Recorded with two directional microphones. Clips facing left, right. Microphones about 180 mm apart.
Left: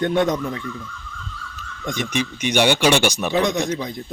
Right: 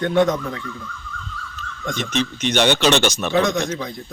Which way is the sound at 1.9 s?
15° left (ahead or behind).